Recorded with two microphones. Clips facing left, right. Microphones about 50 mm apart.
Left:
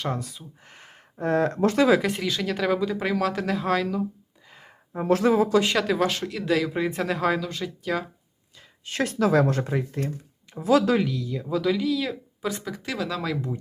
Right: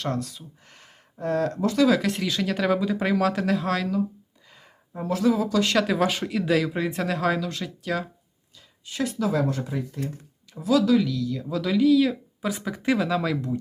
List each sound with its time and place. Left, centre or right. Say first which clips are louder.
0.0 s speech: right 1 dB; centre
0.7 s a sound: left 3 dB; left
1.6 s speech: even; left
2.0 s speech: even; centre
4.9 s speech: left 3 dB; left
5.7 s speech: right 1 dB; centre
8.8 s speech: left 3 dB; left
10.5 s speech: even; left; by 11.6 s centre
11.6 s speech: right 7 dB; centre
12.8 s speech: right 8 dB; centre
13.1 s speech: right 3 dB; centre